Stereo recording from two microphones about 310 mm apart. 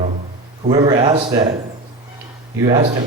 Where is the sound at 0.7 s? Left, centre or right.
Centre.